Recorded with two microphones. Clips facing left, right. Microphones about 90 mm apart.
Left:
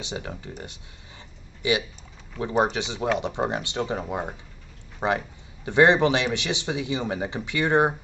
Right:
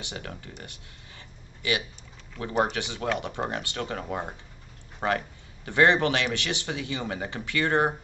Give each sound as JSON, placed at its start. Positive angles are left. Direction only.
{"t": 0.0, "sound": "a man's voice", "side_deg": 20}